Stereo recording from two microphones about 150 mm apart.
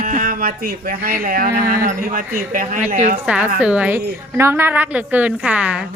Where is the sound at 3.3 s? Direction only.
10° right (ahead or behind).